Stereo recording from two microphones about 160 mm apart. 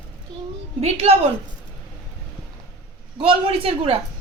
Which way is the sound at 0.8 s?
40° right (ahead or behind).